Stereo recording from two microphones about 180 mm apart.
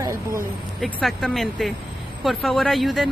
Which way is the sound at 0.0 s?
15° right (ahead or behind).